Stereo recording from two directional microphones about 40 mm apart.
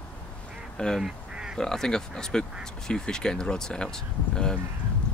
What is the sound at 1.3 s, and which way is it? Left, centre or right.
Duck, centre.